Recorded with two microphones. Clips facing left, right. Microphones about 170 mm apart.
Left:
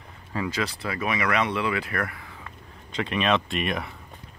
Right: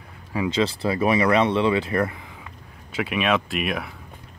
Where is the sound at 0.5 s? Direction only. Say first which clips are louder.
Right 10 dB; 25° right (ahead or behind).